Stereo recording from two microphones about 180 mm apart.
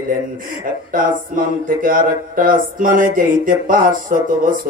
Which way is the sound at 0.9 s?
50° right (ahead or behind).